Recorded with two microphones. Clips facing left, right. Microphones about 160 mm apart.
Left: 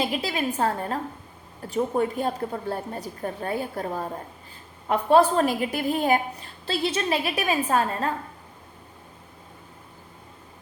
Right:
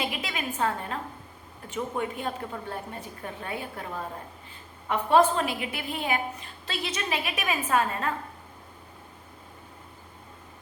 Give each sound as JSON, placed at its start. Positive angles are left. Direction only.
{"t": 0.0, "sound": "a woman's voice", "side_deg": 35}